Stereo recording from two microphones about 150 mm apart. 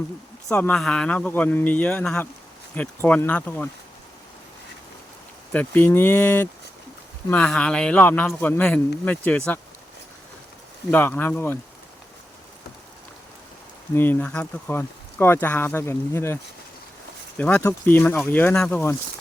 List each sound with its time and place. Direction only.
0.5 s speech: 15° left (ahead or behind)
5.5 s speech: 15° left (ahead or behind)
10.9 s speech: 10° left (ahead or behind)
13.9 s speech: 15° left (ahead or behind)